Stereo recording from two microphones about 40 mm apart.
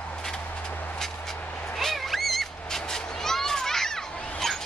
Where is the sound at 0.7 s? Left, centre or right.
Left.